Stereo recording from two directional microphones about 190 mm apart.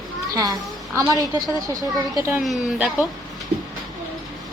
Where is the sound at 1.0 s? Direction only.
20° right (ahead or behind).